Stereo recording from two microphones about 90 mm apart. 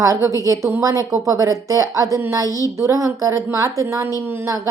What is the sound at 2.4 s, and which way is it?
Child singing, 40° left (ahead or behind).